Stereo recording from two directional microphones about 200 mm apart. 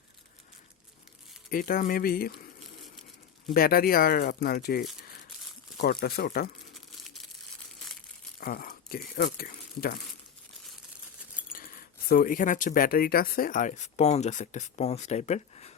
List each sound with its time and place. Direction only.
1.5 s speech: 45° left (ahead or behind)
3.5 s speech: 50° left (ahead or behind)
6.7 s tearing: centre (ahead or behind)
8.4 s speech: 45° left (ahead or behind)
11.5 s speech: 45° left (ahead or behind)